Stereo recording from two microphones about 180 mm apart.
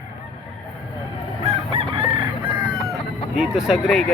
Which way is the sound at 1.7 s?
30° right (ahead or behind).